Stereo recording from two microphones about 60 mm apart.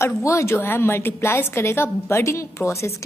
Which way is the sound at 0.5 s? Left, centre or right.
Left.